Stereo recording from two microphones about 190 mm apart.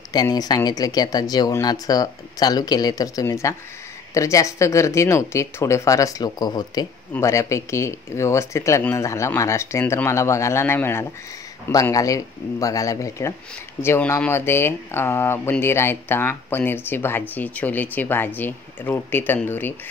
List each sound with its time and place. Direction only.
0.1 s speech: 20° left (ahead or behind)